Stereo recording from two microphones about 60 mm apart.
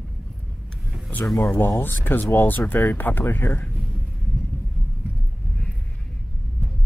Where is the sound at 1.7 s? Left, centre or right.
Left.